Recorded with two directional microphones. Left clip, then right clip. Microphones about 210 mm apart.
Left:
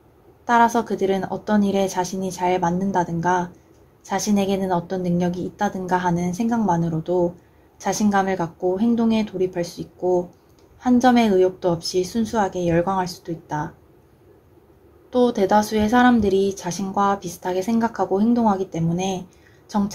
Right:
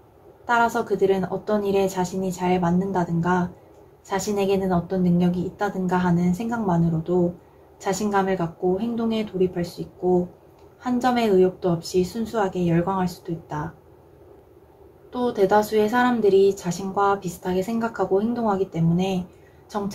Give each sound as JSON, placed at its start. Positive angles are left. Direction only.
{"t": 0.5, "sound": "speech", "side_deg": 45}
{"t": 10.8, "sound": "speech", "side_deg": 45}
{"t": 15.0, "sound": "speech", "side_deg": 45}